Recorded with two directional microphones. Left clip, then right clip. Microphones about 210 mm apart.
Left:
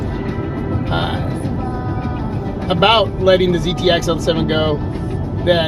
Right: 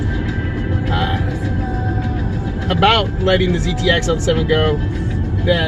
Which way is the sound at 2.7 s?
30° left (ahead or behind).